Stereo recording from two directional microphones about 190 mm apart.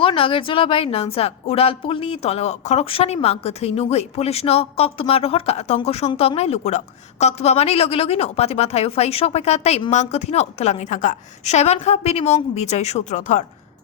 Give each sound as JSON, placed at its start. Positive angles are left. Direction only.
{"t": 0.0, "sound": "a woman's voice", "side_deg": 30}